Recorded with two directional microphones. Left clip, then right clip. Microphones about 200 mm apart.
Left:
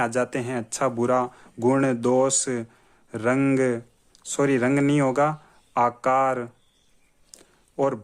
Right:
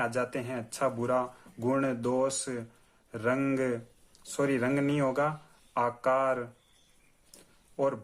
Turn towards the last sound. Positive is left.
turn(degrees=35)  # may be behind; listen again after turning